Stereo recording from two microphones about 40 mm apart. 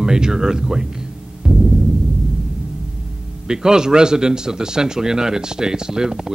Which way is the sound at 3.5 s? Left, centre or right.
Centre.